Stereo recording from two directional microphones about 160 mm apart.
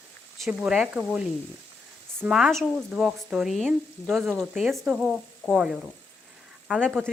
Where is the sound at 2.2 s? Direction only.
5° right (ahead or behind).